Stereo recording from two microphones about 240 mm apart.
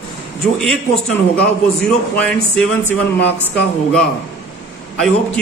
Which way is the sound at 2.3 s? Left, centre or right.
Centre.